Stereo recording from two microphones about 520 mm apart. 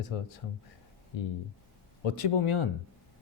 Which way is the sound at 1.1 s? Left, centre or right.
Left.